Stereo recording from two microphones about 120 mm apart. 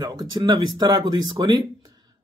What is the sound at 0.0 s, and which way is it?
A man's voice, 35° right (ahead or behind).